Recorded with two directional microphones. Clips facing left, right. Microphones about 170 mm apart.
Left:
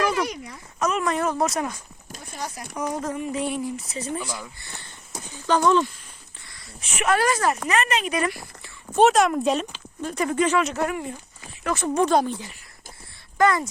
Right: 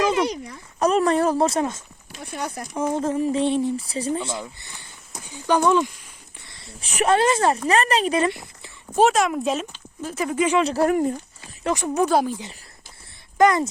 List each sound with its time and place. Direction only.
0.0 s a sound: 20° right (ahead or behind)
0.4 s speech: 35° right (ahead or behind)
2.2 s speech: 60° right (ahead or behind)
2.7 s speech: 25° right (ahead or behind)
5.2 s speech: 15° right (ahead or behind)
6.8 s speech: 35° right (ahead or behind)
9.0 s speech: centre (ahead or behind)
10.6 s speech: 35° right (ahead or behind)
11.7 s speech: 10° right (ahead or behind)
13.4 s speech: 20° right (ahead or behind)